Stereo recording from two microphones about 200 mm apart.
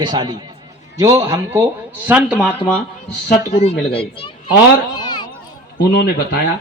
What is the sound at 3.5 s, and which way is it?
Speech, 30° left (ahead or behind).